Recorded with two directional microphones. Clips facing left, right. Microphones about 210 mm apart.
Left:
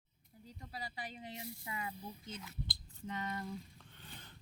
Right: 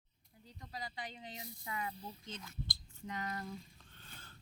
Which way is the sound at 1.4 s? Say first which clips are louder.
Right 3 dB; 25° left (ahead or behind).